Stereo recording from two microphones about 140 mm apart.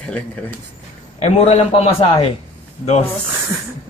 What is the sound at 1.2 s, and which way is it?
Speech, 45° left (ahead or behind).